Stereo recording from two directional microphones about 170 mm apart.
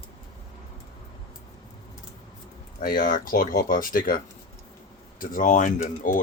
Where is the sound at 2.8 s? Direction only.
55° left (ahead or behind).